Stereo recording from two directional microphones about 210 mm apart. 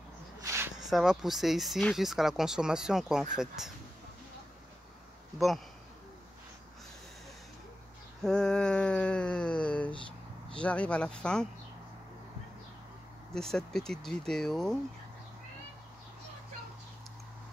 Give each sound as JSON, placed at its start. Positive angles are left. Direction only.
{"t": 0.4, "sound": "a sound", "side_deg": -15}
{"t": 0.7, "sound": "speech", "side_deg": 0}
{"t": 8.2, "sound": "speech", "side_deg": 0}
{"t": 13.3, "sound": "speech", "side_deg": 0}